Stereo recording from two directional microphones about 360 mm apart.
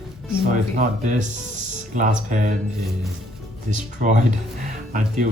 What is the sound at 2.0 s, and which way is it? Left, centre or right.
Speech, right.